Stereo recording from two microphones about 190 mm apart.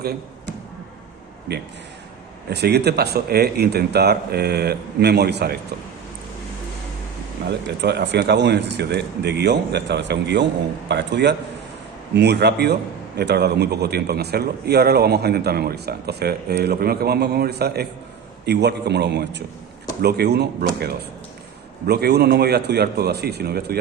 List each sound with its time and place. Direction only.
1.5 s a man's voice: 60° right (ahead or behind)
7.8 s a man's voice: 60° right (ahead or behind)